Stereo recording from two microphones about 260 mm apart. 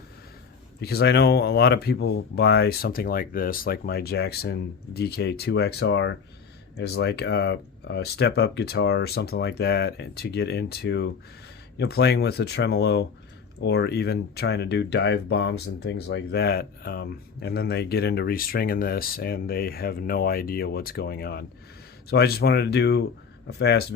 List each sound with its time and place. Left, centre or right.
0.8 s speech: left